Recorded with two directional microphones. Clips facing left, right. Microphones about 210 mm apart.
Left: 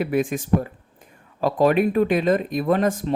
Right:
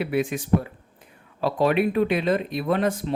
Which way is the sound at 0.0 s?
45° left (ahead or behind).